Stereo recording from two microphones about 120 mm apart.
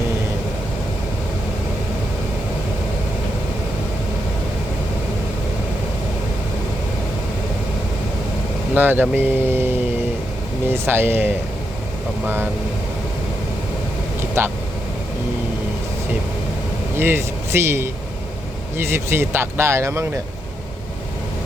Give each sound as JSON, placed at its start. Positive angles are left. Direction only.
{"t": 8.7, "sound": "speech", "side_deg": -15}
{"t": 14.4, "sound": "speech", "side_deg": -20}
{"t": 17.0, "sound": "speech", "side_deg": -20}